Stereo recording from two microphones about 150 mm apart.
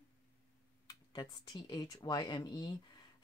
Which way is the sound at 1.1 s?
30° left (ahead or behind).